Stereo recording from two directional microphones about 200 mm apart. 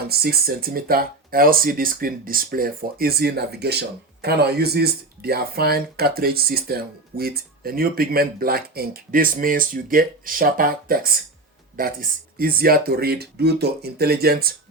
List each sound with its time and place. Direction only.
0.0 s speech: 50° right (ahead or behind)